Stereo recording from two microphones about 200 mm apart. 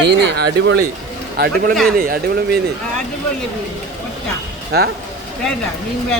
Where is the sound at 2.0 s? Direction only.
45° right (ahead or behind).